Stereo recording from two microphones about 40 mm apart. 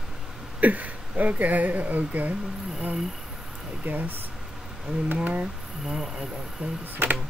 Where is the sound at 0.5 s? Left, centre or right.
Right.